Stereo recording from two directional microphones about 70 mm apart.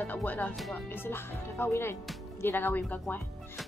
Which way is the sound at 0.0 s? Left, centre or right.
Left.